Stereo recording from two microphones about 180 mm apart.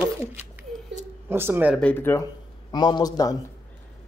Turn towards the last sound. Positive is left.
turn(degrees=20)  # may be behind; listen again after turning